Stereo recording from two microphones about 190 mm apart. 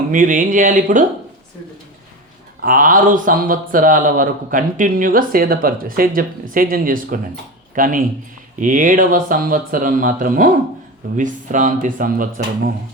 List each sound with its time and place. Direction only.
0.1 s speech: 45° right (ahead or behind)
2.6 s speech: 45° right (ahead or behind)